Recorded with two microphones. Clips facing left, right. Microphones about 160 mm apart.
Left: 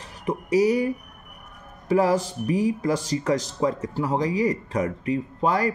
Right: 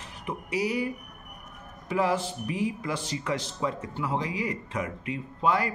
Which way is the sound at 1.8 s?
40° left (ahead or behind).